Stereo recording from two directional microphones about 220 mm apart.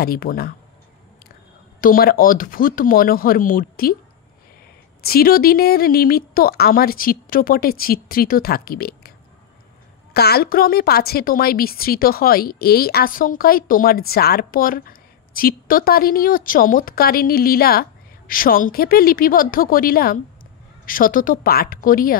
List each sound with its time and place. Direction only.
0.0 s a woman's voice: 40° left (ahead or behind)
1.8 s a woman's voice: 40° left (ahead or behind)
5.0 s a woman's voice: 45° left (ahead or behind)
10.1 s a woman's voice: 45° left (ahead or behind)